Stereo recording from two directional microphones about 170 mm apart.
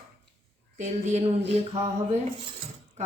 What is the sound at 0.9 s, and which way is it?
Speech, 45° right (ahead or behind).